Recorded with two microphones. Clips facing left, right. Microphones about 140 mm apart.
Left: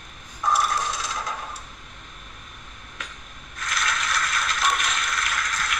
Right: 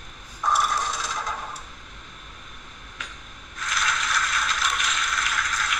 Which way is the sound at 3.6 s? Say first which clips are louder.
Even; 55° left (ahead or behind).